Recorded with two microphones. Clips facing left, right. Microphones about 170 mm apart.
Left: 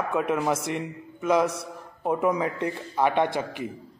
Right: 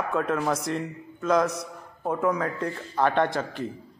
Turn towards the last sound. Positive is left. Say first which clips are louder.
# even
turn(degrees=10)  # may be behind; listen again after turning